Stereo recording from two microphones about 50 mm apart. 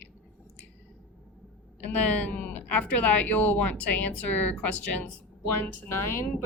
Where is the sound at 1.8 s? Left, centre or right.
Left.